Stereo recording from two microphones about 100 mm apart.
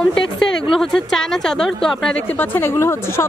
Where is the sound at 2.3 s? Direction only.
20° left (ahead or behind).